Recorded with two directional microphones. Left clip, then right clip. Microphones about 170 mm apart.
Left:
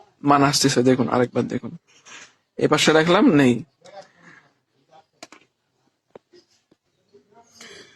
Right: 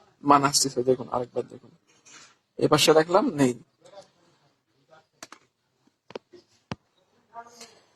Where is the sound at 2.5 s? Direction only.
10° left (ahead or behind).